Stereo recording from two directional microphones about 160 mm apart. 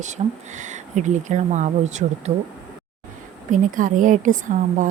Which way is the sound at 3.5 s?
55° right (ahead or behind).